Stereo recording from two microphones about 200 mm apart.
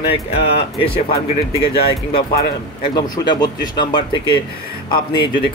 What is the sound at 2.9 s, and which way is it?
Speech, 20° left (ahead or behind).